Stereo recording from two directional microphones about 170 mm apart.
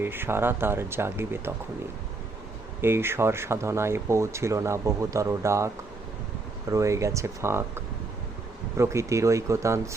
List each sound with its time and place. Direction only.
0.0 s speech: 10° right (ahead or behind)
2.8 s speech: 15° right (ahead or behind)
8.8 s speech: 15° right (ahead or behind)